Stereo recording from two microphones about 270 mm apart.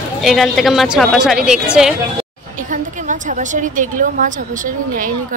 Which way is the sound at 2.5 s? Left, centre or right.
Right.